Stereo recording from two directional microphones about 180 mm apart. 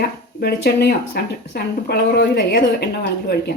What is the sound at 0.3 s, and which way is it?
Speech, 60° left (ahead or behind).